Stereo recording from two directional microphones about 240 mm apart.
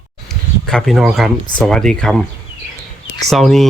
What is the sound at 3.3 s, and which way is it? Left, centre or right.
Speech, centre.